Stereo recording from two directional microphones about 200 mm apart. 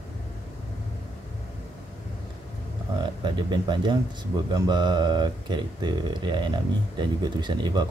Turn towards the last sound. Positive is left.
turn(degrees=-20)  # may be behind; listen again after turning